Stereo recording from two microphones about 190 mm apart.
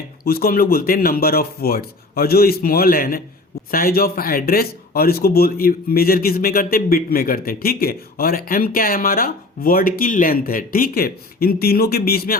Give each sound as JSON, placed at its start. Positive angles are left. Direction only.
{"t": 0.3, "sound": "speech", "side_deg": 50}